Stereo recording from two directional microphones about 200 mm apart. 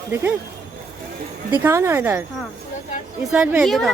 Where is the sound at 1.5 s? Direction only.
10° right (ahead or behind).